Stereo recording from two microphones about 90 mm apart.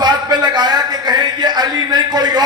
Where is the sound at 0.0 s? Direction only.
50° right (ahead or behind).